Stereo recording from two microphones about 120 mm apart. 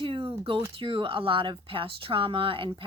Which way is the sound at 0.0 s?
50° right (ahead or behind).